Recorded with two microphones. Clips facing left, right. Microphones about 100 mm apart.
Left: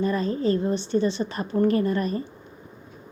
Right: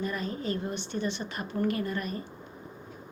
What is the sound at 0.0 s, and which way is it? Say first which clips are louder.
A woman's voice: left 9 dB; 35° left (ahead or behind).